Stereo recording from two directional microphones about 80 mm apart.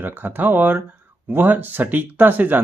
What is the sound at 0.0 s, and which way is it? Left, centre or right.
Speech, right.